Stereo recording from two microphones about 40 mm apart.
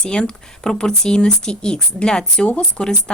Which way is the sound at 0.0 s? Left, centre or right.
Centre.